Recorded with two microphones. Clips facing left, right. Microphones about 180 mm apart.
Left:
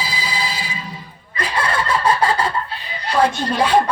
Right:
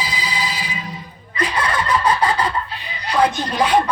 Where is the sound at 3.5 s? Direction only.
30° left (ahead or behind).